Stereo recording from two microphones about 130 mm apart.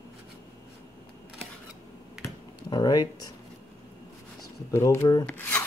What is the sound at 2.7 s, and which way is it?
Speech, 30° left (ahead or behind).